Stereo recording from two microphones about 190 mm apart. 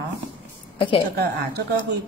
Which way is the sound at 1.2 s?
60° right (ahead or behind).